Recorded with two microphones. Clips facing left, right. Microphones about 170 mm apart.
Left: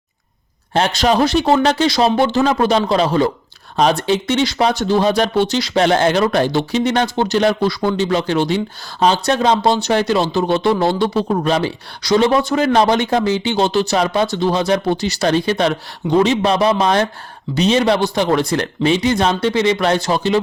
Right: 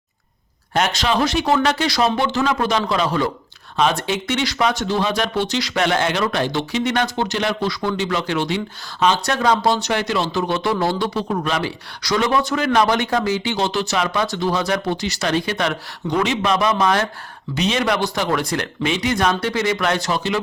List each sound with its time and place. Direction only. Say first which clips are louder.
0.7 s speech: left 4 dB; 30° left (ahead or behind)